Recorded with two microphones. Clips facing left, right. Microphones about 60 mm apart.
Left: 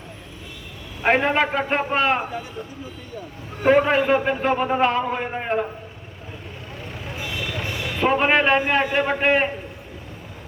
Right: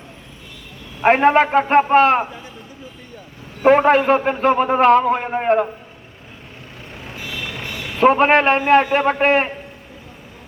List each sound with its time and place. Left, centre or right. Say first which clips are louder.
1.0 s a man's voice: right 6 dB; right
3.6 s a man's voice: right 4 dB; right
8.0 s a man's voice: right 5 dB; right